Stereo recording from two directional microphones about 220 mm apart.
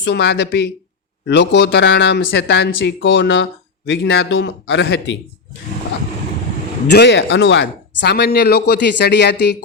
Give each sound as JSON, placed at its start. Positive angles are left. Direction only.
{"t": 0.0, "sound": "speech", "side_deg": 50}
{"t": 6.8, "sound": "speech", "side_deg": 50}